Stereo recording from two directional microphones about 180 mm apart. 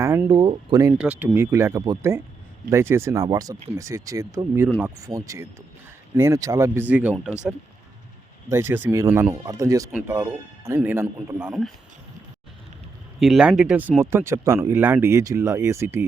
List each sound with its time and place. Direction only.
0.0 s speech: 15° right (ahead or behind)
0.9 s speech: 10° right (ahead or behind)
8.4 s speech: 15° right (ahead or behind)
13.1 s speech: centre (ahead or behind)